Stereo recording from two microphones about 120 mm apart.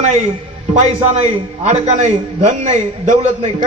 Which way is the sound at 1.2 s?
65° right (ahead or behind).